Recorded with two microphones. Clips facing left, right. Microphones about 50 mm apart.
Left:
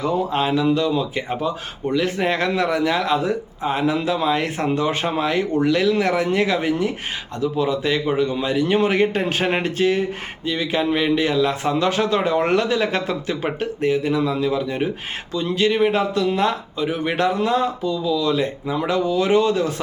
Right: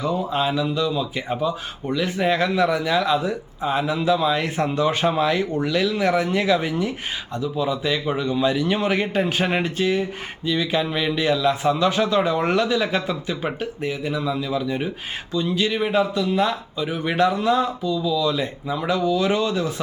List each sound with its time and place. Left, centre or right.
0.5 s a man's voice: left